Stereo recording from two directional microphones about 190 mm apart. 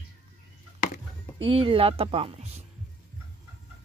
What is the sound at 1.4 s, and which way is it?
Speech, 30° right (ahead or behind).